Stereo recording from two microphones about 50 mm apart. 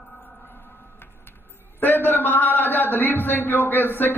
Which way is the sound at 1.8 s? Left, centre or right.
Left.